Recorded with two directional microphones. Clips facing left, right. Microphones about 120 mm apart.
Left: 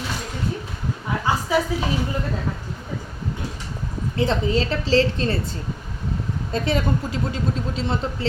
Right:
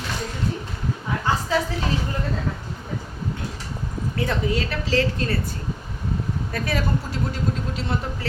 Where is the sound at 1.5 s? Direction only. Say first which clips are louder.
Left 3 dB; 15° left (ahead or behind).